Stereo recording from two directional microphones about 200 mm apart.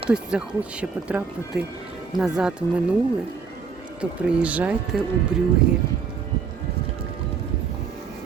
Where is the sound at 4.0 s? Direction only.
5° right (ahead or behind).